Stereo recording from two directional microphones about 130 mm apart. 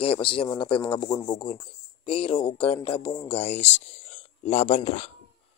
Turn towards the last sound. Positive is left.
turn(degrees=55)  # may be behind; listen again after turning